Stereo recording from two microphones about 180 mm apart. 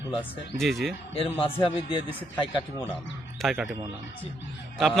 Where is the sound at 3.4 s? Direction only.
Centre (ahead or behind).